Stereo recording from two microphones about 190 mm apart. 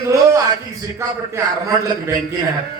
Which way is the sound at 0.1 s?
15° right (ahead or behind).